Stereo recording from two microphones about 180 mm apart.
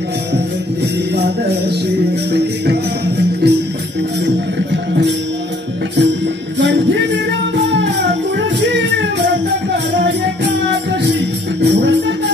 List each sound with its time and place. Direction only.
2.3 s music: 65° right (ahead or behind)
6.6 s music: 80° right
8.4 s music: 75° right (ahead or behind)
11.6 s music: 70° right (ahead or behind)